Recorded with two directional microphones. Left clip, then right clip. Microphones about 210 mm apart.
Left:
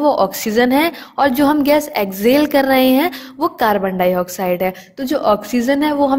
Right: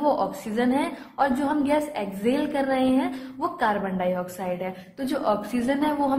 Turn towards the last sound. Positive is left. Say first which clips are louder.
# left 9 dB
turn(degrees=40)  # may be behind; listen again after turning